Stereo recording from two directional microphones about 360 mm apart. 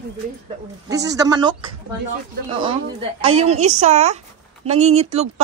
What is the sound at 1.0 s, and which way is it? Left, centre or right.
Speech, centre.